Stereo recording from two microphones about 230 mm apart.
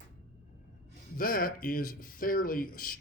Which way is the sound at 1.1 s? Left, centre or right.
Left.